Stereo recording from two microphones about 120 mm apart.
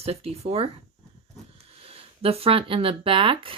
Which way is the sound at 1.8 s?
55° right (ahead or behind).